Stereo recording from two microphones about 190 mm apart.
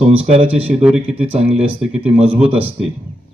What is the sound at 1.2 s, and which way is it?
Speech, 30° right (ahead or behind).